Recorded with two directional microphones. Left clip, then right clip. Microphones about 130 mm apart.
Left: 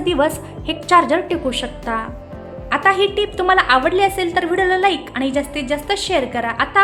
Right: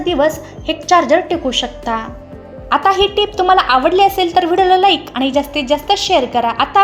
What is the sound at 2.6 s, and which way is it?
A woman's voice, 20° right (ahead or behind).